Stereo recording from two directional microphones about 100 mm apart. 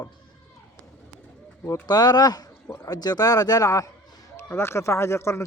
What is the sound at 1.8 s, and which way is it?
Speech, 45° left (ahead or behind).